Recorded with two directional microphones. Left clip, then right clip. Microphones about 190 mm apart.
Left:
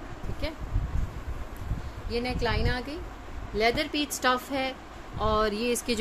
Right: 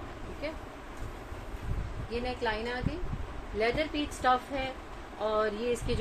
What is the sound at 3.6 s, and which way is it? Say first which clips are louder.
Speech: left 4 dB; 65° left (ahead or behind).